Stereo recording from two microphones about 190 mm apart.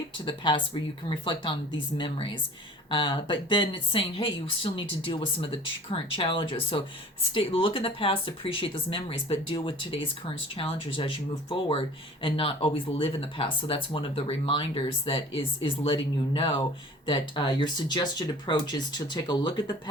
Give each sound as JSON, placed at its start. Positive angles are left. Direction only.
{"t": 0.3, "sound": "speech", "side_deg": 25}